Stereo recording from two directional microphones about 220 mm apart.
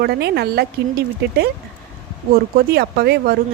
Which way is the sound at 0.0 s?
45° right (ahead or behind).